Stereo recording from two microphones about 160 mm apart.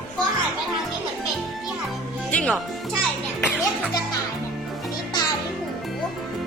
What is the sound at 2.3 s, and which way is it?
Music, 5° left (ahead or behind).